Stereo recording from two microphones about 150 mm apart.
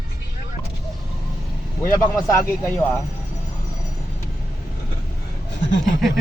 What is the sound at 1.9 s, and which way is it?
Speech, 20° left (ahead or behind).